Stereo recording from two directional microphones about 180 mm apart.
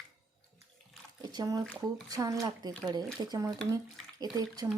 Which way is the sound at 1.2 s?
20° right (ahead or behind).